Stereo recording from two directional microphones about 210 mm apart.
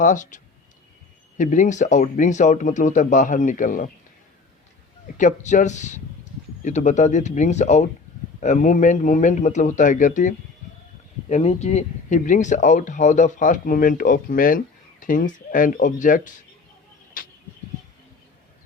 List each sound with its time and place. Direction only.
0.0 s speech: 35° left (ahead or behind)
5.1 s speech: 35° left (ahead or behind)
17.2 s vehicle: 40° left (ahead or behind)